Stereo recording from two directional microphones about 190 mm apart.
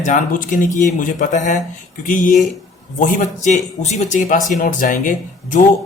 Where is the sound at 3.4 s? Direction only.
40° left (ahead or behind).